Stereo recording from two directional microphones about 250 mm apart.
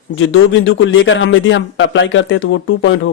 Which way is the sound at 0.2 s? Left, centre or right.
Left.